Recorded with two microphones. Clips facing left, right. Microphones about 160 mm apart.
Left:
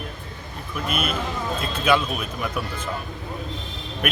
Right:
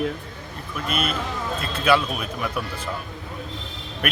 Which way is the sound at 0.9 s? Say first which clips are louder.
Right 1 dB; 50° left (ahead or behind).